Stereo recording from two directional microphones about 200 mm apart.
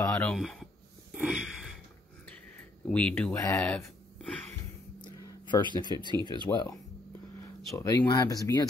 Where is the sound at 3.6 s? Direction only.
5° left (ahead or behind).